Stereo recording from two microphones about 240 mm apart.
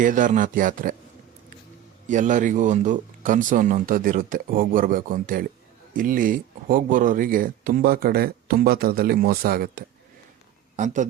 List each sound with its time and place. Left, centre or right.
0.0 s speech: right
2.0 s speech: right